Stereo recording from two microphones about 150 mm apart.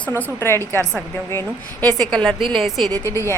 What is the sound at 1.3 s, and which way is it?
A woman's voice, 10° left (ahead or behind).